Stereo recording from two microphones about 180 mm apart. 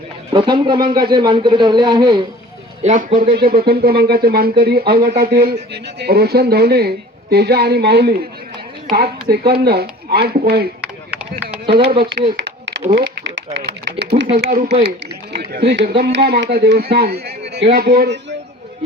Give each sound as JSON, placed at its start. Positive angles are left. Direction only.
{"t": 0.3, "sound": "a man's voice", "side_deg": -25}
{"t": 2.8, "sound": "speech", "side_deg": -45}
{"t": 11.7, "sound": "speech", "side_deg": -60}
{"t": 12.4, "sound": "a sound", "side_deg": -85}
{"t": 13.0, "sound": "speech", "side_deg": -90}
{"t": 14.3, "sound": "speech", "side_deg": -50}